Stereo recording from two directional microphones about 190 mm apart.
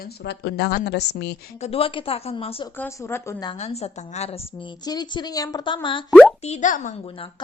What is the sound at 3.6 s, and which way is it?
A woman's voice, 35° left (ahead or behind).